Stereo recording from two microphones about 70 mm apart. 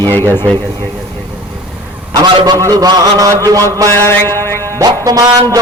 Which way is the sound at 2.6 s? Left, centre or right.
Right.